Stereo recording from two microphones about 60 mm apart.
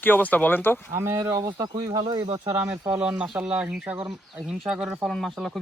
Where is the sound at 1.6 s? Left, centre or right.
Right.